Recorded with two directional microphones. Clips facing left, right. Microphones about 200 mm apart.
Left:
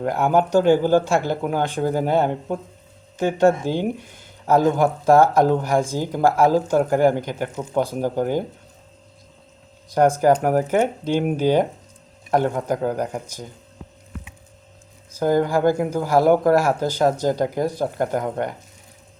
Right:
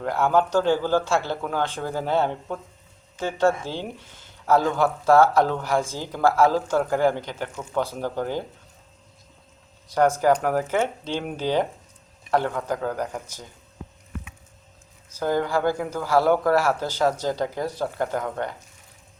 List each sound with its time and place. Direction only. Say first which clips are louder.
0.0 s speech: left 2 dB; 15° left (ahead or behind)
9.9 s speech: left 3 dB; 15° left (ahead or behind)
15.2 s speech: left 5 dB; 15° left (ahead or behind)